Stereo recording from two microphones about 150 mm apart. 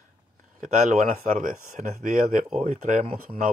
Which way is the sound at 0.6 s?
55° right (ahead or behind).